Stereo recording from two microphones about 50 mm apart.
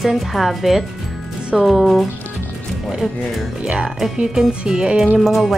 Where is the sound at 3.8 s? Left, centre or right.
Centre.